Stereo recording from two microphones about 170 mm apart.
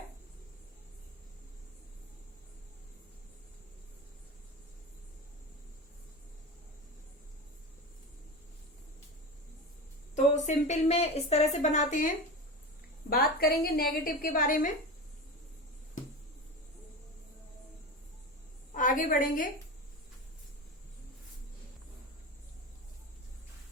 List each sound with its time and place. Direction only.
10.3 s a woman's voice: 45° left (ahead or behind)
13.1 s a woman's voice: 65° left (ahead or behind)
18.7 s a woman's voice: 50° left (ahead or behind)